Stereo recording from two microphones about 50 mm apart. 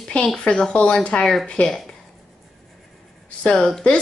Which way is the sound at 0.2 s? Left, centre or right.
Centre.